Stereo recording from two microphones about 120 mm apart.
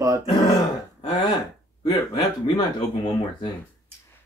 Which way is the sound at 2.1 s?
45° left (ahead or behind).